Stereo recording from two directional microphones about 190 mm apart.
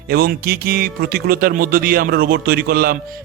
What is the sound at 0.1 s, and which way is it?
Speech, 55° right (ahead or behind).